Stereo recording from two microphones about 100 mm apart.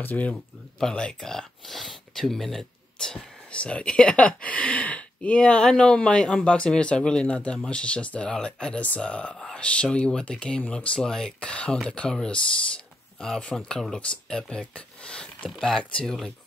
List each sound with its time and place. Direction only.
0.0 s speech: 15° left (ahead or behind)